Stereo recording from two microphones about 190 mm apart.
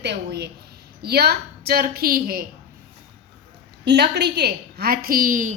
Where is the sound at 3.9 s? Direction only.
60° right (ahead or behind); by 5.5 s 45° right (ahead or behind).